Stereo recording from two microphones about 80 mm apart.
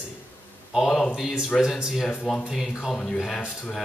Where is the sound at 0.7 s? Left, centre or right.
Centre.